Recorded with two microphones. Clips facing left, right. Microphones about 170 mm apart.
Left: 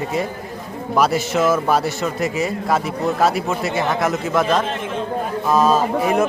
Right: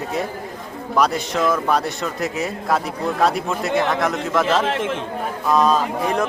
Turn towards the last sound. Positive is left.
turn(degrees=5)  # may be behind; listen again after turning